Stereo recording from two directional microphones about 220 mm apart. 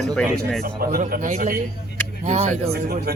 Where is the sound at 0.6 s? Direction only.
40° right (ahead or behind).